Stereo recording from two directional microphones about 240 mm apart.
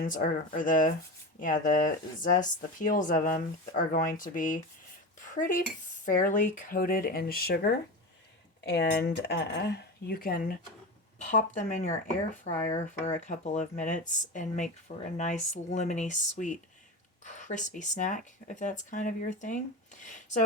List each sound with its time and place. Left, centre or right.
0.0 s speech: left
12.5 s speech: centre
12.9 s speech: left